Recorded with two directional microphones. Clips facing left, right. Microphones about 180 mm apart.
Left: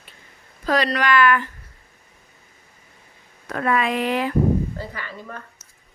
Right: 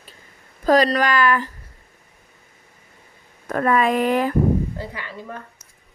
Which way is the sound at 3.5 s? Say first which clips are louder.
Right 3 dB; 45° right (ahead or behind).